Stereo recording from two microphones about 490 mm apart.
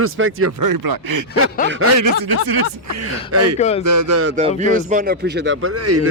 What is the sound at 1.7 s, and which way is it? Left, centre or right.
Speech, right.